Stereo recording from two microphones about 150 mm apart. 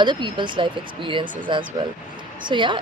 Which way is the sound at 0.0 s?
30° right (ahead or behind).